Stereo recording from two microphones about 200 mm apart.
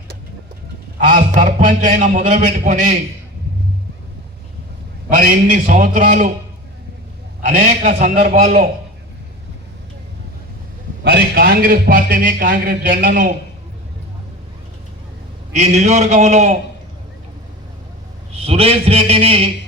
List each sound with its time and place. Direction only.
0.9 s a man's voice: 40° right (ahead or behind)
5.0 s a man's voice: 40° right (ahead or behind)
7.4 s a man's voice: 40° right (ahead or behind)
11.0 s a man's voice: 50° right (ahead or behind)
15.5 s a man's voice: 35° right (ahead or behind)
18.3 s a man's voice: 30° right (ahead or behind)